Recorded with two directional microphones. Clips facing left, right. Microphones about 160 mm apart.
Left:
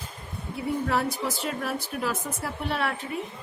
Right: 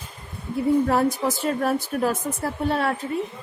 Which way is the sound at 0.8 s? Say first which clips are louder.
Right 6 dB; 40° right (ahead or behind).